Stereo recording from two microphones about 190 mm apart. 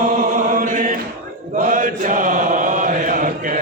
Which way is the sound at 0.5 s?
45° right (ahead or behind).